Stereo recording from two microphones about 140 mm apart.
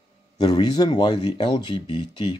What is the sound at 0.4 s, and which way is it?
Speech, 30° left (ahead or behind).